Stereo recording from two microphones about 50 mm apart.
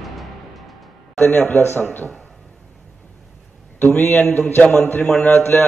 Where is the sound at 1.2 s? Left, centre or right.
Centre.